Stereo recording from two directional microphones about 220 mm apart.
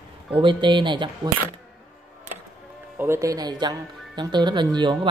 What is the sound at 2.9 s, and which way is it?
Speech, 10° right (ahead or behind).